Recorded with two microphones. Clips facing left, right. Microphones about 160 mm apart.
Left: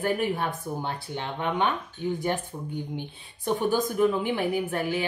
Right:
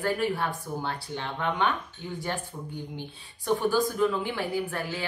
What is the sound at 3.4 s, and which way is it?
A woman's voice, 20° left (ahead or behind).